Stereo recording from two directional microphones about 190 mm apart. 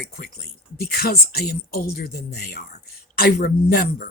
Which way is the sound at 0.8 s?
55° left (ahead or behind).